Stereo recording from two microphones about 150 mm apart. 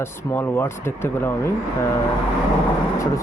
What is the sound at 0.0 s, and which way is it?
Speech, 15° left (ahead or behind).